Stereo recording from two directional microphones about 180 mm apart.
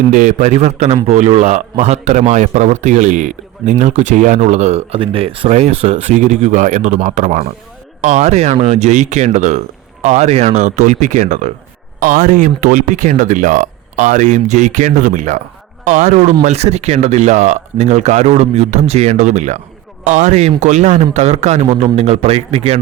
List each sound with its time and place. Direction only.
0.1 s speech: 45° right (ahead or behind)